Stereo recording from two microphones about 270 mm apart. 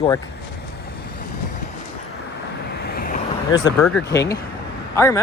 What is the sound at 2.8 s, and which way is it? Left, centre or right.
Vehicle, left.